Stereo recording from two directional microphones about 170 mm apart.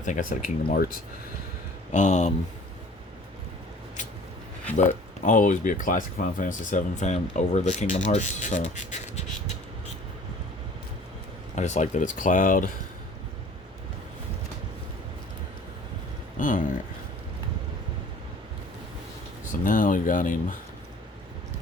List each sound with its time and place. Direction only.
0.0 s speech: 50° left (ahead or behind)
1.9 s speech: 45° left (ahead or behind)
4.8 s speech: 45° left (ahead or behind)
11.5 s speech: 45° left (ahead or behind)
16.4 s speech: 50° left (ahead or behind)
19.6 s speech: 50° left (ahead or behind)